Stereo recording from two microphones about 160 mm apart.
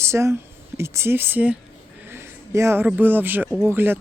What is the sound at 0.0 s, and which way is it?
A man's voice, 15° right (ahead or behind).